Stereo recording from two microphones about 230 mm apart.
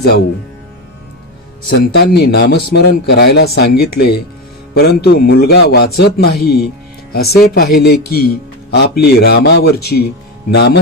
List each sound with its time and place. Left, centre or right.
1.6 s a man's voice: left